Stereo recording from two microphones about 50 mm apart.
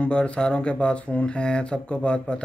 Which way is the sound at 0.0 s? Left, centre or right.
Left.